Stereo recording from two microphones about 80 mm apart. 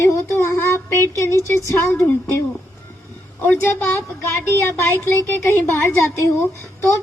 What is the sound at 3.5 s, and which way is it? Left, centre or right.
Speech, left.